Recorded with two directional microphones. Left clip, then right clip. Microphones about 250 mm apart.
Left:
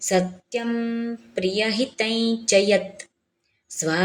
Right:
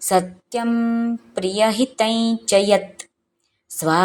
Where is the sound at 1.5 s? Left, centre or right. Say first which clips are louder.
Right 7 dB; right.